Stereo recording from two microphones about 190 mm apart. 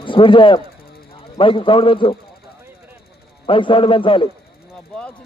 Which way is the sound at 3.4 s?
25° left (ahead or behind).